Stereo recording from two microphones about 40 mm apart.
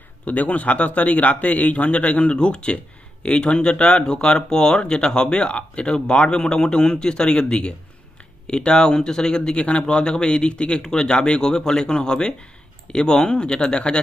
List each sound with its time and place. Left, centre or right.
0.2 s a man's voice: left
2.3 s speech: left